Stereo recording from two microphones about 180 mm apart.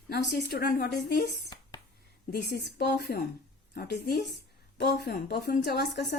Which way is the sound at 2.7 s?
65° left (ahead or behind).